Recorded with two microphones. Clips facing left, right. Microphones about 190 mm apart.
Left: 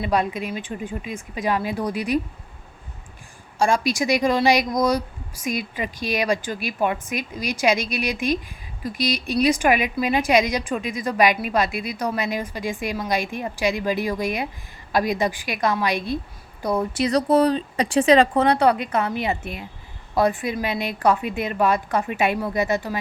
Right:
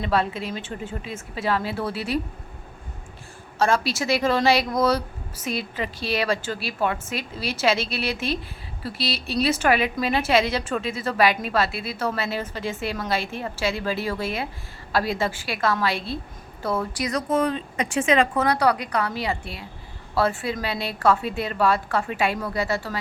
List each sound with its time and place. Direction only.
0.0 s a woman's voice: 15° left (ahead or behind)
3.6 s a woman's voice: 15° left (ahead or behind)